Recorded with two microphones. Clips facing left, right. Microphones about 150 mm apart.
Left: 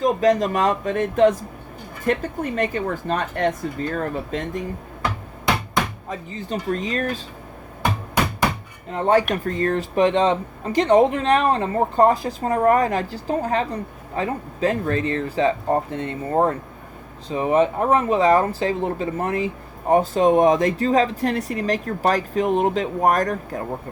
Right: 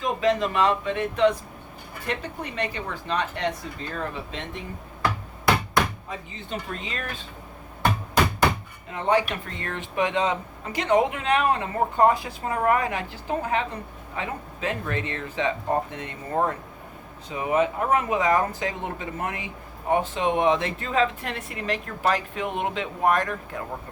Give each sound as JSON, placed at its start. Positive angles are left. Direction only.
{"t": 0.0, "sound": "speech", "side_deg": 40}
{"t": 6.1, "sound": "speech", "side_deg": 40}
{"t": 8.9, "sound": "speech", "side_deg": 45}